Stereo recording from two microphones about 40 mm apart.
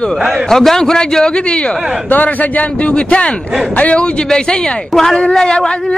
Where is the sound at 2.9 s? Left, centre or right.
Left.